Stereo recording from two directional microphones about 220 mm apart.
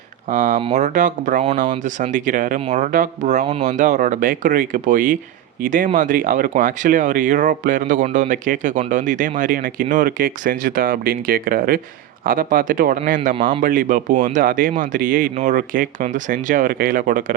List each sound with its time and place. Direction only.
0.3 s speech: 35° right (ahead or behind)